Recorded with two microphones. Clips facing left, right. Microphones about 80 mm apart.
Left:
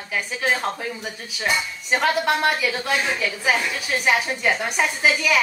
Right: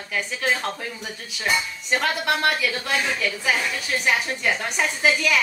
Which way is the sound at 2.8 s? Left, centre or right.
Centre.